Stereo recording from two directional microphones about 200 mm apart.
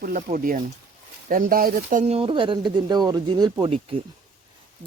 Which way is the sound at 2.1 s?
25° right (ahead or behind).